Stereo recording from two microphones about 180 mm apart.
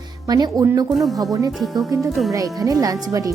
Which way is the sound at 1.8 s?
20° right (ahead or behind).